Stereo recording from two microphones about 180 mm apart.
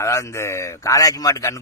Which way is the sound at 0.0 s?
15° left (ahead or behind).